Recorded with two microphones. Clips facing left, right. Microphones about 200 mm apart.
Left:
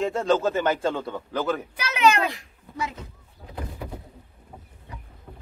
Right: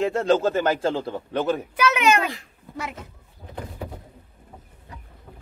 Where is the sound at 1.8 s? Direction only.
55° right (ahead or behind).